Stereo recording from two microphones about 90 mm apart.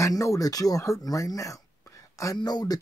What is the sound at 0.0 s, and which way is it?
Speech, 35° left (ahead or behind).